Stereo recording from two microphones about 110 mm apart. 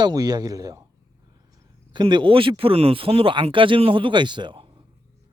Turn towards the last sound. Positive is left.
turn(degrees=-45)  # may be behind; listen again after turning